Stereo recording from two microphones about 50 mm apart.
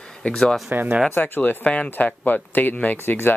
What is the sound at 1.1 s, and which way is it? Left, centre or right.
Speech, left.